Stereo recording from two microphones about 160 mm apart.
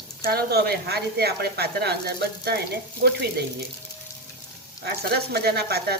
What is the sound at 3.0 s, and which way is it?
Speech, 90° right.